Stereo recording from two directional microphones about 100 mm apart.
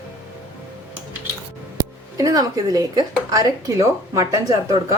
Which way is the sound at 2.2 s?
35° right (ahead or behind).